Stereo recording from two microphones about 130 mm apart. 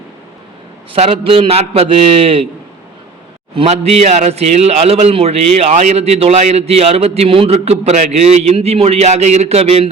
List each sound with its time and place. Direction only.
0.9 s a man's voice: 50° right (ahead or behind)
3.5 s a man's voice: 50° right (ahead or behind)